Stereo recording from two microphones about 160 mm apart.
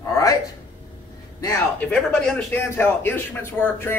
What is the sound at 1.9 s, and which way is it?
Speech, 5° left (ahead or behind).